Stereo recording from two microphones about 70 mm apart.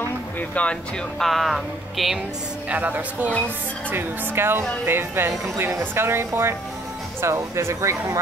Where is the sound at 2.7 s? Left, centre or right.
Right.